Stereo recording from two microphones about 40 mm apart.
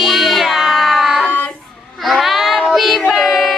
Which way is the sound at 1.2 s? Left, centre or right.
Left.